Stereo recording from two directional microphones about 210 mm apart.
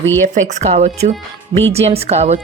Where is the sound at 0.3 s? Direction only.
35° right (ahead or behind).